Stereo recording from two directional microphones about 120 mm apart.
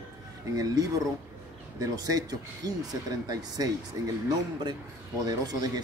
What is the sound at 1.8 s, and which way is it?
Speech, 30° right (ahead or behind).